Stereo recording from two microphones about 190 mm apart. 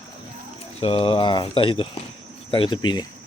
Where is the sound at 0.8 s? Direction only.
30° left (ahead or behind).